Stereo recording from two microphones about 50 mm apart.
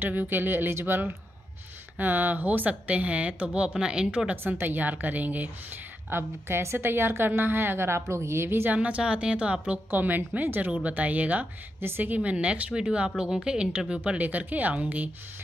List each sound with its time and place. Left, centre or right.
0.0 s a woman's voice: right; by 4.4 s centre
4.4 s a woman's voice: right
8.7 s speech: right
9.8 s a woman's voice: right
14.1 s a woman's voice: right